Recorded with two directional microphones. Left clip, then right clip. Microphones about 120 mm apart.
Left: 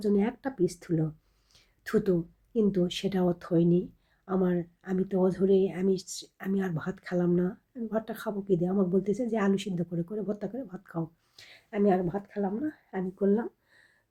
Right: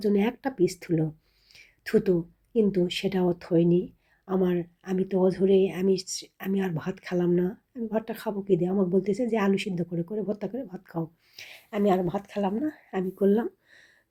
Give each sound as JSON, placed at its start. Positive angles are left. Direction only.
{"t": 0.0, "sound": "speech", "side_deg": -10}
{"t": 11.7, "sound": "speech", "side_deg": -25}